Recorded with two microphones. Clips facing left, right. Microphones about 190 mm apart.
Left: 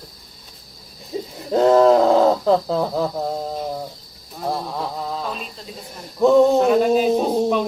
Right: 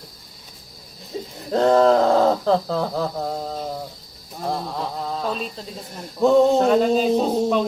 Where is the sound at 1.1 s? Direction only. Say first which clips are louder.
Left 3 dB; 15° left (ahead or behind).